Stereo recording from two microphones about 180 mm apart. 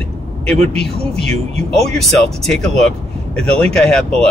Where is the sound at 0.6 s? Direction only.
35° right (ahead or behind).